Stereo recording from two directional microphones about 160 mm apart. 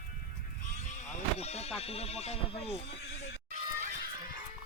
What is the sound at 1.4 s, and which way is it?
Music, 40° left (ahead or behind).